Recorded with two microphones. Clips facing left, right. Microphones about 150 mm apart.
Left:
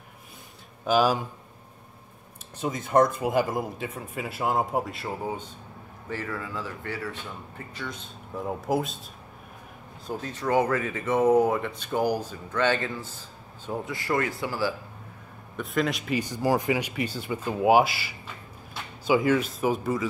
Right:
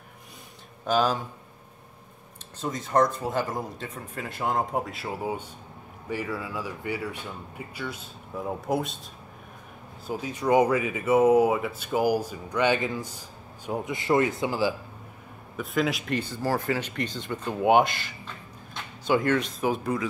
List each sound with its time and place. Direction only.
0.8 s speech: 5° left (ahead or behind)
2.6 s speech: 5° left (ahead or behind)
10.0 s speech: 10° right (ahead or behind)
15.5 s speech: centre (ahead or behind)
16.2 s speech: 15° left (ahead or behind)